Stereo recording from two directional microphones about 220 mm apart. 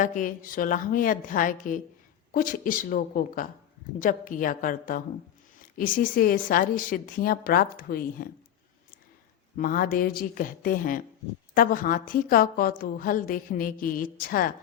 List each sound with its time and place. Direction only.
0.0 s a woman's voice: 35° left (ahead or behind)
9.6 s a woman's voice: 40° left (ahead or behind)